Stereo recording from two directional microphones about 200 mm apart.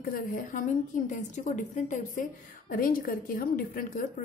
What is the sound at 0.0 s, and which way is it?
A woman's voice, 45° left (ahead or behind).